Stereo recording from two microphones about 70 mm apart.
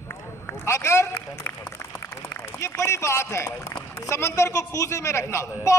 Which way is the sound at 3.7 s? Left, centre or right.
Left.